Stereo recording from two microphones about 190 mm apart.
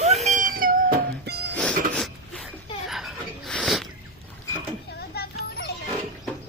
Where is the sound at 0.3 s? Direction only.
45° right (ahead or behind).